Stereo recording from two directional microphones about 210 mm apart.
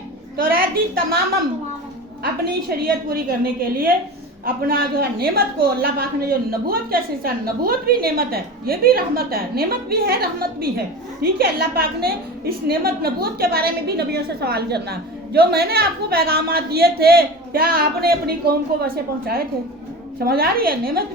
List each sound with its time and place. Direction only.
0.3 s a woman's voice: 45° right (ahead or behind)
2.4 s a woman's voice: 45° right (ahead or behind)